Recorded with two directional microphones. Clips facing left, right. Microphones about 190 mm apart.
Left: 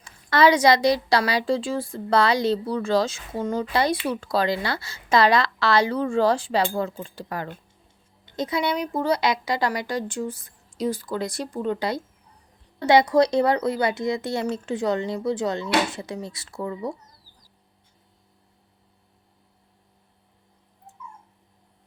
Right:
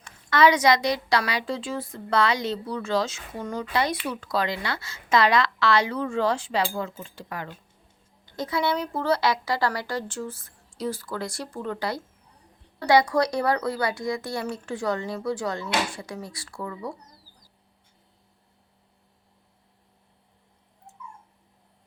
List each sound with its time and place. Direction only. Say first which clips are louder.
0.0 s a woman's voice: left 2 dB; 30° left (ahead or behind)
8.2 s a woman's voice: left 1 dB; 20° left (ahead or behind)